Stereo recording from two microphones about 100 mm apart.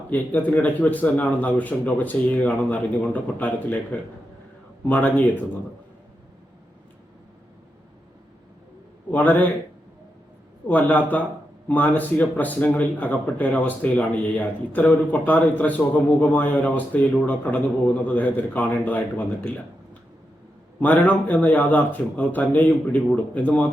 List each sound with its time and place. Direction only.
0.1 s speech: 15° left (ahead or behind)
4.9 s speech: 15° left (ahead or behind)
9.1 s speech: 15° left (ahead or behind)
10.7 s speech: 15° left (ahead or behind)